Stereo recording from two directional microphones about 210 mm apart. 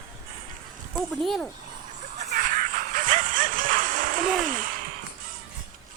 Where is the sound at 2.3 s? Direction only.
40° right (ahead or behind).